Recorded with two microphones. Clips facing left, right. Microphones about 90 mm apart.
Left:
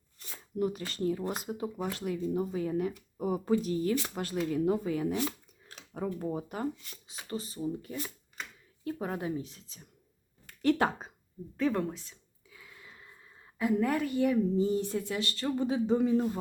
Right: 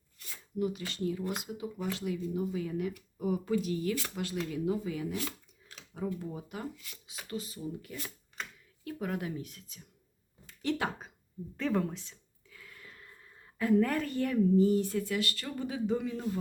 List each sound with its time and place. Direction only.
0.2 s speech: 40° left (ahead or behind)
5.6 s a sound: 50° left (ahead or behind)
6.1 s speech: 45° left (ahead or behind); by 9.8 s 30° left (ahead or behind)
10.4 s a sound: 50° left (ahead or behind)
11.5 s speech: centre (ahead or behind)
12.5 s a woman's voice: 15° left (ahead or behind)